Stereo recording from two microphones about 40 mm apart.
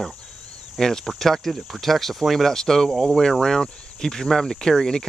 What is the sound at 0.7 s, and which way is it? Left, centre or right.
Speech, centre.